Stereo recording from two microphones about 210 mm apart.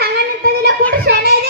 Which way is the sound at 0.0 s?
50° right (ahead or behind).